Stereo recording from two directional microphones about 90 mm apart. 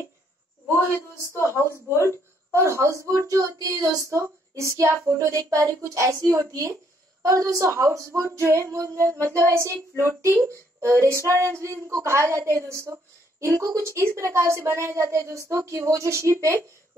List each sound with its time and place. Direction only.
2.0 s speech: 35° right (ahead or behind)